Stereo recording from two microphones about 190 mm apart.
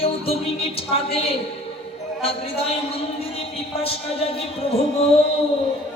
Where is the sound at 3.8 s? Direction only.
30° left (ahead or behind).